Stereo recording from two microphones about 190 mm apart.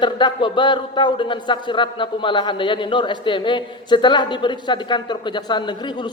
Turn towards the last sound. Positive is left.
turn(degrees=25)  # may be behind; listen again after turning